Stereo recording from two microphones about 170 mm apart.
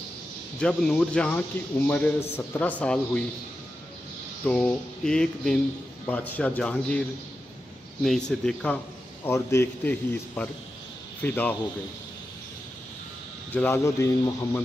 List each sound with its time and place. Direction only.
0.6 s a man's voice: 5° left (ahead or behind)
4.5 s a man's voice: 5° left (ahead or behind)
9.2 s a man's voice: 15° left (ahead or behind)
13.5 s a man's voice: 10° left (ahead or behind)